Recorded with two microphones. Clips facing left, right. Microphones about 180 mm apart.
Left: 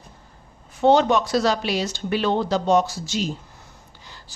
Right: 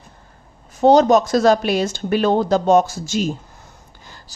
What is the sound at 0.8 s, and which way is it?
Speech, 40° right (ahead or behind).